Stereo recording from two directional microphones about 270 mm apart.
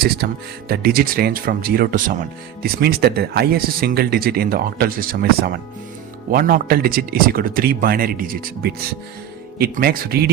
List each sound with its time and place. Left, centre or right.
0.2 s speech: right